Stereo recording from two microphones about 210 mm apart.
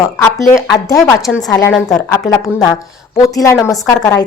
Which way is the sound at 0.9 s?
Centre (ahead or behind).